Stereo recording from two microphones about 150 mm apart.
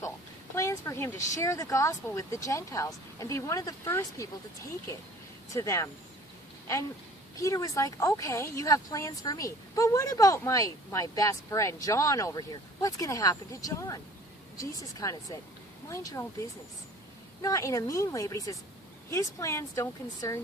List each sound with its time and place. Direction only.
0.5 s speech: 20° left (ahead or behind)
5.5 s speech: 20° left (ahead or behind)
7.3 s speech: 20° left (ahead or behind)